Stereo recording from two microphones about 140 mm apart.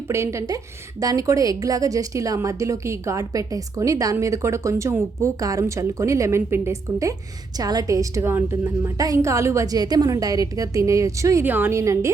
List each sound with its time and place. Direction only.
0.1 s a woman's voice: 20° right (ahead or behind)